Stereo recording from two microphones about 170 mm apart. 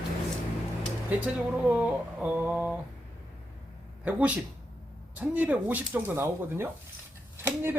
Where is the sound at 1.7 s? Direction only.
10° right (ahead or behind).